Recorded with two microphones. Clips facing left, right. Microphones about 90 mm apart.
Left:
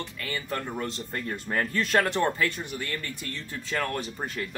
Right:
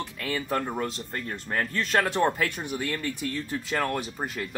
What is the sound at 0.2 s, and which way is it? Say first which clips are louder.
Speech: right 5 dB; 15° right (ahead or behind).